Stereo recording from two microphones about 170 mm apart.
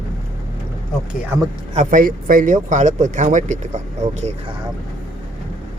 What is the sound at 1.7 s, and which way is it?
Speech, 50° right (ahead or behind).